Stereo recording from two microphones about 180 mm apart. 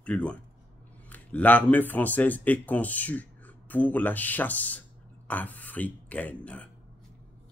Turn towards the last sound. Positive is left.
turn(degrees=5)  # may be behind; listen again after turning